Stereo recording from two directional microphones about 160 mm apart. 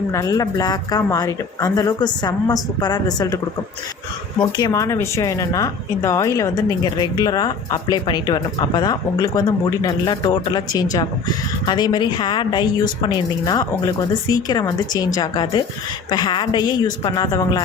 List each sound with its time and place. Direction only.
0.1 s speech: 20° left (ahead or behind)